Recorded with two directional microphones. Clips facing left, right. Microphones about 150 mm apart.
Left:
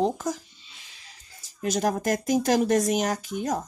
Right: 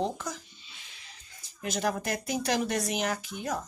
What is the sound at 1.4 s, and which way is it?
Speech, 40° left (ahead or behind).